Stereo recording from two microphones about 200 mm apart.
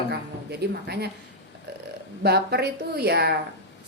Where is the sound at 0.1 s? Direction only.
55° right (ahead or behind).